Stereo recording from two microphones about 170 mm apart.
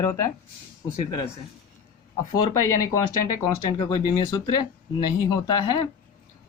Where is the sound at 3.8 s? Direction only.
25° left (ahead or behind).